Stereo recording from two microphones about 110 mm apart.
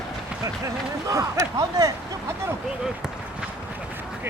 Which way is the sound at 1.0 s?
30° right (ahead or behind).